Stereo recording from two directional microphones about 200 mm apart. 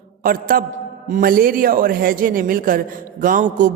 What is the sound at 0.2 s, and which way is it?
A man's voice, 45° right (ahead or behind).